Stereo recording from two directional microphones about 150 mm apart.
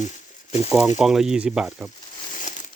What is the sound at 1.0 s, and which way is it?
Speech, 5° right (ahead or behind).